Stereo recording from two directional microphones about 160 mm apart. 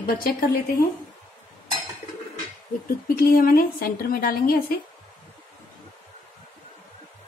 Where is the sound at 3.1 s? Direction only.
65° left (ahead or behind).